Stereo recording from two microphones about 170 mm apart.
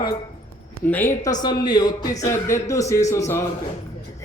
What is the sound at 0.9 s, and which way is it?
A man's voice, 15° left (ahead or behind).